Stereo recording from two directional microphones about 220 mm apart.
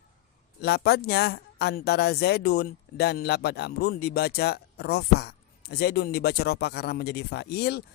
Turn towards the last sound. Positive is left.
turn(degrees=45)  # may be behind; listen again after turning